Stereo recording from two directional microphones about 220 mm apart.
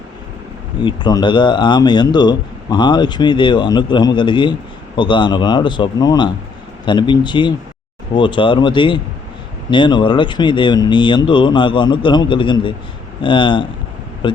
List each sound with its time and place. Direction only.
0.8 s speech: 20° left (ahead or behind)